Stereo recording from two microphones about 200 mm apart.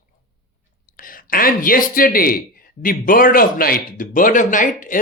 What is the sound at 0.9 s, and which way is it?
Speech, 45° left (ahead or behind).